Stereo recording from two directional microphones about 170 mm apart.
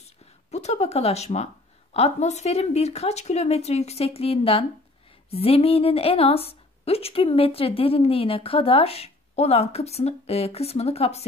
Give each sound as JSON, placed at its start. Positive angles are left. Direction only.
{"t": 0.5, "sound": "a woman's voice", "side_deg": 40}